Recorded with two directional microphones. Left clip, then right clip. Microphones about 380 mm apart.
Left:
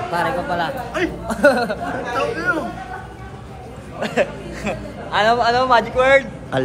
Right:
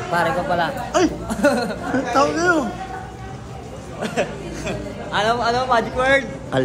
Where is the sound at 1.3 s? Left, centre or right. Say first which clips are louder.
Left 4 dB; centre.